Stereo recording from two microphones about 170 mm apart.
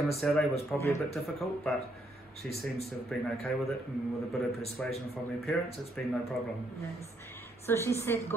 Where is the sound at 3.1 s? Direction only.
5° left (ahead or behind).